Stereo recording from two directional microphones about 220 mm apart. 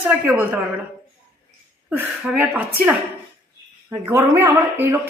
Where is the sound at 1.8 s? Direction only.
5° right (ahead or behind).